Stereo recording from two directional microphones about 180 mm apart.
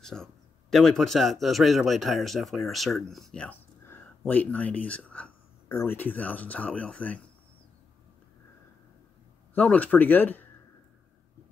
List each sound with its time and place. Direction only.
0.0 s speech: 5° left (ahead or behind)
9.5 s speech: 10° left (ahead or behind)